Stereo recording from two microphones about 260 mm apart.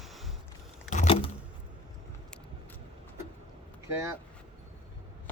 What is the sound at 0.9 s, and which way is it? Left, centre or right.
Vehicle, left.